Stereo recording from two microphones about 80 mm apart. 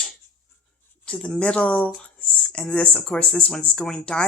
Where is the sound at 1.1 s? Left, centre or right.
Centre.